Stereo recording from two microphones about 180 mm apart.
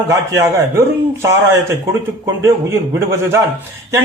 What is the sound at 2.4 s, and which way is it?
Speech, 15° right (ahead or behind).